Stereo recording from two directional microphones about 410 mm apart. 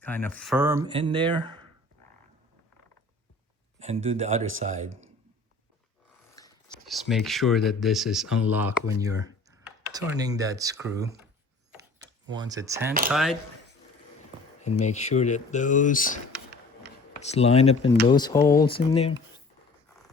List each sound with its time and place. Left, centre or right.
0.0 s speech: centre
3.8 s speech: centre
4.9 s speech: right
6.3 s speech: centre
12.3 s speech: centre
14.6 s speech: centre